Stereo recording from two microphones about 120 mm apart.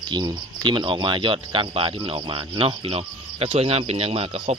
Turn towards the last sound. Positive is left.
turn(degrees=-55)  # may be behind; listen again after turning